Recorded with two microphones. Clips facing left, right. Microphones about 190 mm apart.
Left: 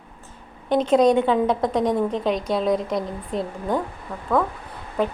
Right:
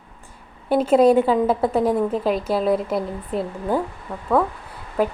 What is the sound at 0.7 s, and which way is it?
A woman's voice, 5° right (ahead or behind).